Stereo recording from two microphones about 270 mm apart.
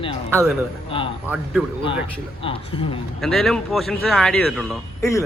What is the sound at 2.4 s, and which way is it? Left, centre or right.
Speech, centre.